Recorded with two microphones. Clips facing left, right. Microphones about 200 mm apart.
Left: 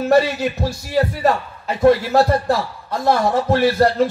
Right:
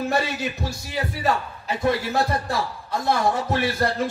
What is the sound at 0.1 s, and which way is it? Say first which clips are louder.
A man's voice: left 9 dB; 55° left (ahead or behind).